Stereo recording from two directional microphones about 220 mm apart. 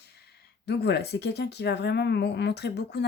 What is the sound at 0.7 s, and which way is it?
Speech, 50° left (ahead or behind).